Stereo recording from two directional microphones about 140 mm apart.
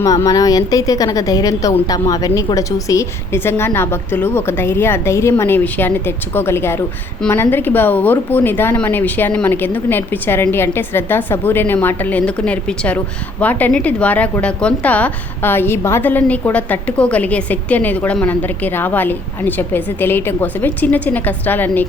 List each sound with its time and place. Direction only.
0.0 s a woman's voice: 25° left (ahead or behind)